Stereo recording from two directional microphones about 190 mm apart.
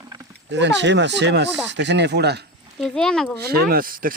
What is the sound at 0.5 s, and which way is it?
Speech, 70° right (ahead or behind).